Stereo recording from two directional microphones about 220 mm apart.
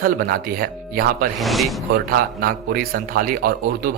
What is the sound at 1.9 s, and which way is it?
A man's voice, 45° right (ahead or behind).